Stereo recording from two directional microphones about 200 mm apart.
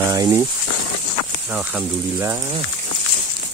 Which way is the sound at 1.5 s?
5° right (ahead or behind).